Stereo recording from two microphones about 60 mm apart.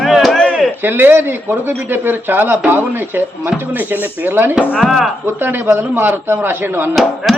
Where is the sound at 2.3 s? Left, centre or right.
Right.